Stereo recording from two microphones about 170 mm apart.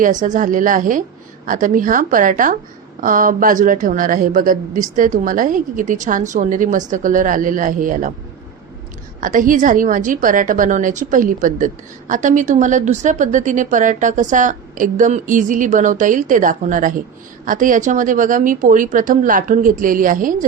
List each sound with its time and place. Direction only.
0.0 s a woman's voice: 50° right (ahead or behind)
9.2 s a woman's voice: 50° right (ahead or behind)